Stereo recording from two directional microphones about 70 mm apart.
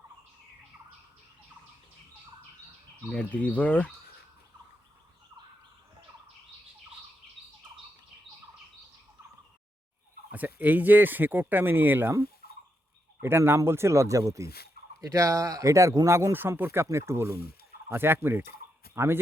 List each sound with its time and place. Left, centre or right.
3.1 s speech: centre
10.3 s speech: right
13.2 s speech: right
16.1 s speech: right